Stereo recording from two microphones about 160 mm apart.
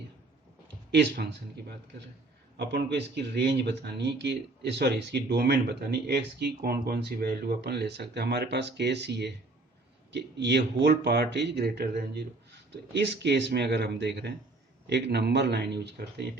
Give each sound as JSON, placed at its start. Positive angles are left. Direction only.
{"t": 0.9, "sound": "speech", "side_deg": -90}